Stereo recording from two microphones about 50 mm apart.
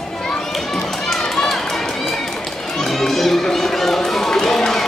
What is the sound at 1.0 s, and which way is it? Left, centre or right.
Children playing, centre.